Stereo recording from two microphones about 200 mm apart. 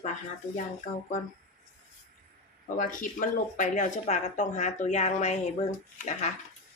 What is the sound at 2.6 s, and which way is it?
Speech, 40° left (ahead or behind).